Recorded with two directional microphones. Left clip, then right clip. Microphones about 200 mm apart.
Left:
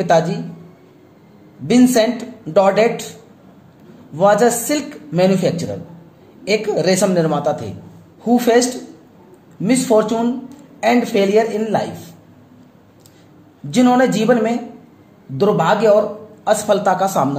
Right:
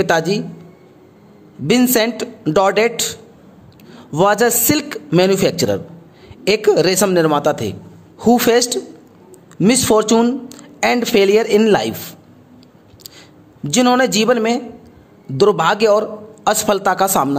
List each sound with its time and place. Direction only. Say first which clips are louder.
0.0 s speech: left 1 dB; 40° right (ahead or behind)
1.7 s speech: left 1 dB; 45° right (ahead or behind)
4.2 s speech: left 1 dB; 45° right (ahead or behind)
13.7 s speech: even; 50° right (ahead or behind)